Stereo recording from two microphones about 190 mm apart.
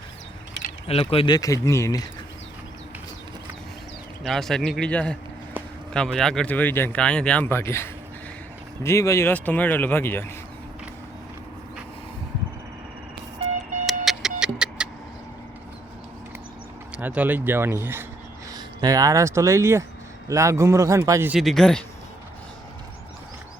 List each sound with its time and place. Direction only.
0.9 s speech: 30° left (ahead or behind)
4.2 s a man's voice: centre (ahead or behind)
13.8 s music: centre (ahead or behind)
16.9 s a man's voice: 5° right (ahead or behind)